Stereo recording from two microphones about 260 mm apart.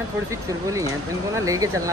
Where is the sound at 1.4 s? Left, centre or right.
Centre.